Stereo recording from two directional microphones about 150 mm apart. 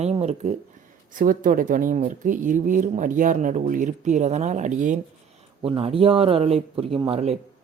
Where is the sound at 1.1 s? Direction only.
65° right (ahead or behind).